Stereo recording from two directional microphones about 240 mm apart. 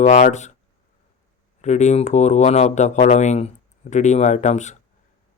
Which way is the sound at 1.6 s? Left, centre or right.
Left.